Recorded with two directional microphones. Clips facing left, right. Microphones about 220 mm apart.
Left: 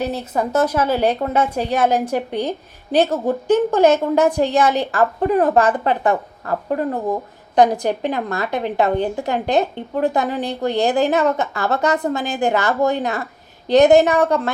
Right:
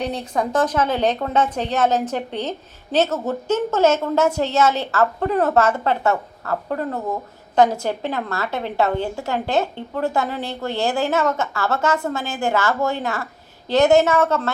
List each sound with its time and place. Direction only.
0.0 s a woman's voice: 5° left (ahead or behind)